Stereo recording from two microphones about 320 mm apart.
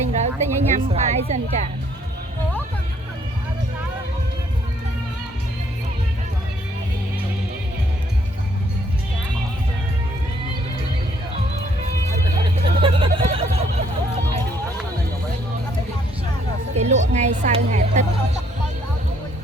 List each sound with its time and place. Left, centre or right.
0.1 s a woman's voice: right
12.6 s vehicle: centre
16.7 s music: right